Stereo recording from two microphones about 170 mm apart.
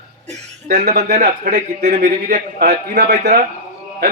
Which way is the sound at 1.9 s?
60° right (ahead or behind).